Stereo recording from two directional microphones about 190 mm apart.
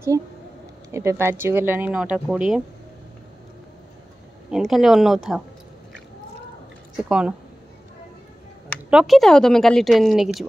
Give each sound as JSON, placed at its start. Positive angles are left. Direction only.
{"t": 0.1, "sound": "speech", "side_deg": -15}
{"t": 4.5, "sound": "a woman's voice", "side_deg": 0}
{"t": 7.0, "sound": "a woman's voice", "side_deg": -5}
{"t": 8.9, "sound": "a woman's voice", "side_deg": 0}